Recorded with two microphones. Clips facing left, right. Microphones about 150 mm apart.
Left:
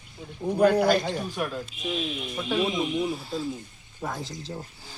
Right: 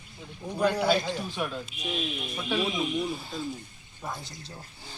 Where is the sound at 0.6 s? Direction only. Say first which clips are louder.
Left 6 dB; 55° left (ahead or behind).